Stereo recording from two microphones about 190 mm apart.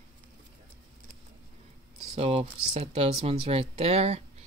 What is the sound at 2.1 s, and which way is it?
Speech, 30° right (ahead or behind).